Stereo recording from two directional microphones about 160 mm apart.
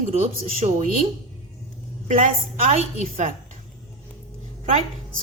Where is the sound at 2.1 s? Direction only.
50° right (ahead or behind).